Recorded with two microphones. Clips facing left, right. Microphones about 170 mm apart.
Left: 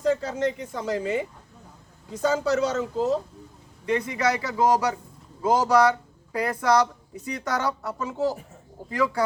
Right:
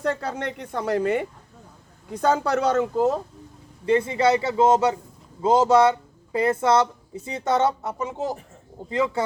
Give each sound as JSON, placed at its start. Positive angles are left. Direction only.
{"t": 0.0, "sound": "speech", "side_deg": -60}
{"t": 3.8, "sound": "speech", "side_deg": -30}